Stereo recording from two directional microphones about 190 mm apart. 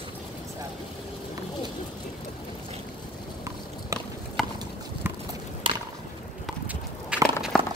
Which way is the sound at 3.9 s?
15° right (ahead or behind).